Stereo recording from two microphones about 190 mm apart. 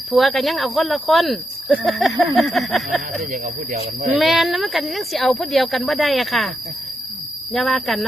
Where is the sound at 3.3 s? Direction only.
45° right (ahead or behind).